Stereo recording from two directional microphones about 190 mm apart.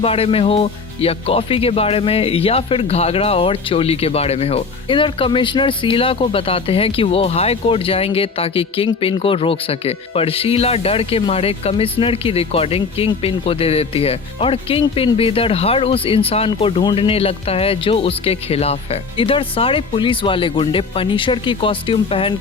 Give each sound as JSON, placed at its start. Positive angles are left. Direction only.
{"t": 0.0, "sound": "speech", "side_deg": 30}